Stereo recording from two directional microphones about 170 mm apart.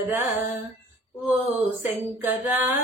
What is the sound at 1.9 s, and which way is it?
Music, 10° right (ahead or behind).